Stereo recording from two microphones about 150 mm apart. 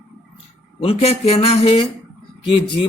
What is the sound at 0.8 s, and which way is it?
Speech, 45° left (ahead or behind).